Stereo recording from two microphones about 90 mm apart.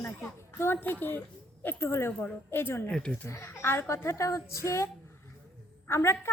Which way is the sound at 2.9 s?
10° left (ahead or behind).